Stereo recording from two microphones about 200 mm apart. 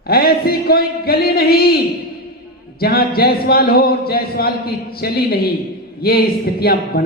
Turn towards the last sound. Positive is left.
turn(degrees=50)  # may be behind; listen again after turning